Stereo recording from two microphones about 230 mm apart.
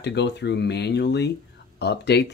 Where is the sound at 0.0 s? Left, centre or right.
Left.